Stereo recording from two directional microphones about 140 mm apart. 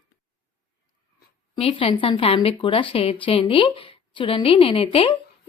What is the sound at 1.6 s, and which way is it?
A woman's voice, 40° left (ahead or behind).